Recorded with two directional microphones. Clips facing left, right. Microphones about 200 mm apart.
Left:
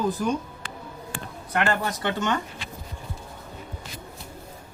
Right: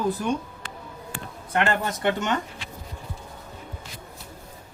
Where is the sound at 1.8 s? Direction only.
20° right (ahead or behind).